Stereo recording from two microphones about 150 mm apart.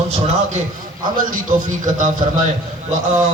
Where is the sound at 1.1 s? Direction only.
65° right (ahead or behind).